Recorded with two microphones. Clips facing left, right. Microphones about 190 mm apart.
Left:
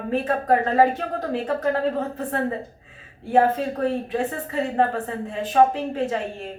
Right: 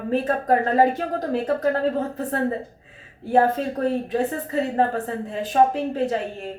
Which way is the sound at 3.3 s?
40° right (ahead or behind).